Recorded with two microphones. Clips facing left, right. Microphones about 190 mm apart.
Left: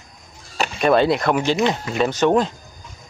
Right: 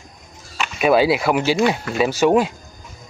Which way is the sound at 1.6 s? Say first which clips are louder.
Right 2 dB; 20° left (ahead or behind).